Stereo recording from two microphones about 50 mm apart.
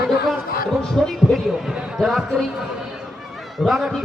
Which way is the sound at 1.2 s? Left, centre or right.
Centre.